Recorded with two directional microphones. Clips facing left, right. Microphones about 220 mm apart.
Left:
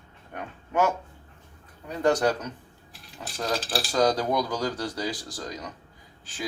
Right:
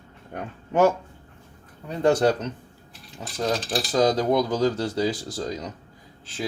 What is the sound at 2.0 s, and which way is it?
Speech, 25° right (ahead or behind).